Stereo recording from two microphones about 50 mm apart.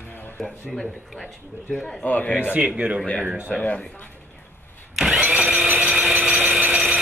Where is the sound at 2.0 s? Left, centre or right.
Left.